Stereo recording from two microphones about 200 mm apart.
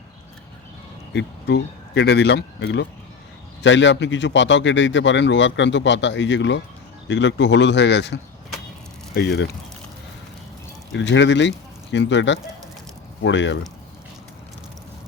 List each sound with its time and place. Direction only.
1.1 s a man's voice: 60° left (ahead or behind)
10.9 s a man's voice: 65° left (ahead or behind)